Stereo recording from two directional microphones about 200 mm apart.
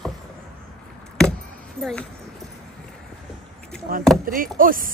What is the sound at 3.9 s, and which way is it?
Speech, 45° right (ahead or behind).